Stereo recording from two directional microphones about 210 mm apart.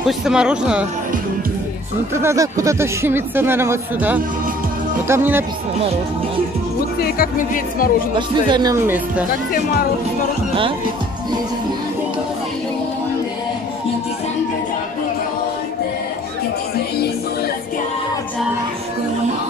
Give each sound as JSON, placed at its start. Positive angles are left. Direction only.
{"t": 0.0, "sound": "speech", "side_deg": 0}
{"t": 2.1, "sound": "speech", "side_deg": -15}
{"t": 7.0, "sound": "speech", "side_deg": 45}
{"t": 8.5, "sound": "speech", "side_deg": -20}
{"t": 9.5, "sound": "speech", "side_deg": 45}